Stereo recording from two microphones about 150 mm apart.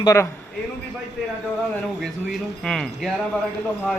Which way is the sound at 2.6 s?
5° left (ahead or behind).